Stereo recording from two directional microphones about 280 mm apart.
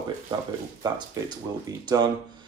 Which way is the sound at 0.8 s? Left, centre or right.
Centre.